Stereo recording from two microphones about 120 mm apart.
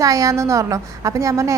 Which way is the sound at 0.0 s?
30° right (ahead or behind).